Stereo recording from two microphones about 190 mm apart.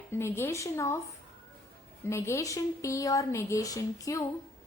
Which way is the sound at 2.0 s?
15° left (ahead or behind).